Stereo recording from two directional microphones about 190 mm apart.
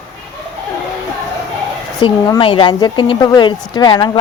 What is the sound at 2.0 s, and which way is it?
A woman's voice, 20° left (ahead or behind).